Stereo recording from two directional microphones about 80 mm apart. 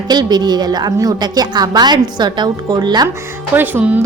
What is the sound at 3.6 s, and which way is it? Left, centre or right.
Music, right.